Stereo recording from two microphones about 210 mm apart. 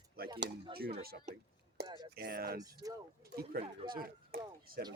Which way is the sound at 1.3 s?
35° right (ahead or behind).